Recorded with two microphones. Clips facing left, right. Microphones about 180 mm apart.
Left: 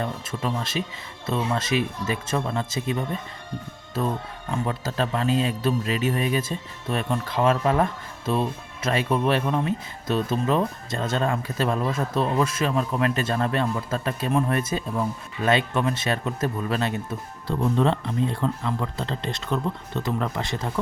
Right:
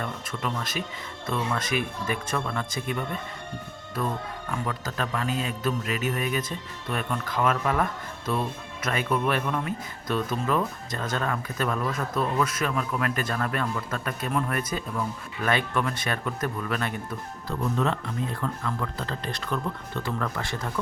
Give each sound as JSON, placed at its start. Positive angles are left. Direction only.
{"t": 0.0, "sound": "speech", "side_deg": 25}
{"t": 4.5, "sound": "speech", "side_deg": 30}